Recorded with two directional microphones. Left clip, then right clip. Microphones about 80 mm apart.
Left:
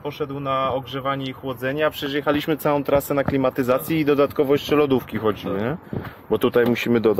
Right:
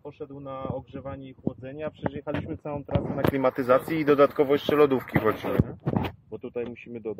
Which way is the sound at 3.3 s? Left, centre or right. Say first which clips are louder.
Right 1 dB; left.